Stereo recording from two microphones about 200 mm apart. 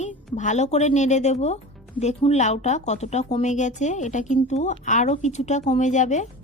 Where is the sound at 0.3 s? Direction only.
35° left (ahead or behind).